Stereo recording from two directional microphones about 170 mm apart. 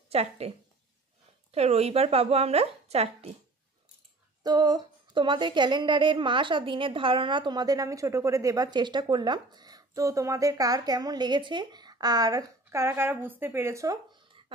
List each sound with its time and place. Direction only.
0.1 s speech: 40° right (ahead or behind)
1.5 s speech: 40° right (ahead or behind)
4.4 s a woman's voice: 25° right (ahead or behind)